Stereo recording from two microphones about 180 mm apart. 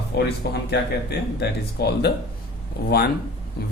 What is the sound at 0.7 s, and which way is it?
Speech, 65° left (ahead or behind).